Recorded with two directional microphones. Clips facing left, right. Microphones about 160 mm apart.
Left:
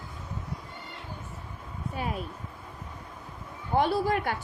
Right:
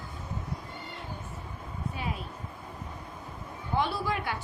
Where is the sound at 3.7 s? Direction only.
45° left (ahead or behind).